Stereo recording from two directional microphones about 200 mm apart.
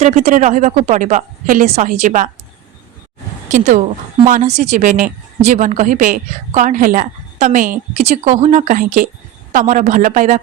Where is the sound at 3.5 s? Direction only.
40° right (ahead or behind).